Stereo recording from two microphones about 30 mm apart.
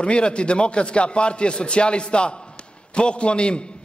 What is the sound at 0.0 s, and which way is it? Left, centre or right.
A man's voice, left.